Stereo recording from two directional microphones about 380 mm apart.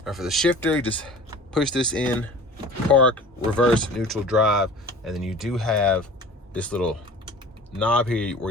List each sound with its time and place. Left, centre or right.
0.0 s speech: centre